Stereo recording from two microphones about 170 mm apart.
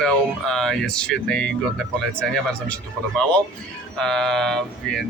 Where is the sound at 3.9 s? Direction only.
5° left (ahead or behind).